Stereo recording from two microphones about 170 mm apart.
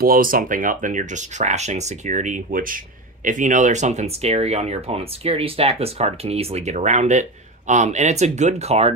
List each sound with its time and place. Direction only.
0.0 s speech: 55° right (ahead or behind); by 8.9 s 40° right (ahead or behind)